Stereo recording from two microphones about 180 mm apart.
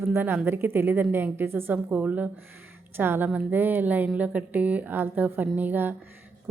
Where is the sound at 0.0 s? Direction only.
10° right (ahead or behind).